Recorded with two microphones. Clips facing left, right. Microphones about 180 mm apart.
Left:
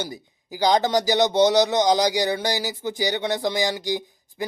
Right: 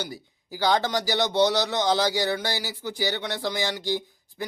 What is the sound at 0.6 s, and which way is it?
Speech, 15° left (ahead or behind).